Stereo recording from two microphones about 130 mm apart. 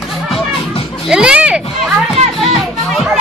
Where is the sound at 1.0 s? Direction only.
5° right (ahead or behind).